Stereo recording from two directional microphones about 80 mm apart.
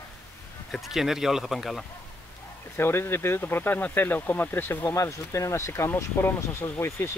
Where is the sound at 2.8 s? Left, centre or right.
Left.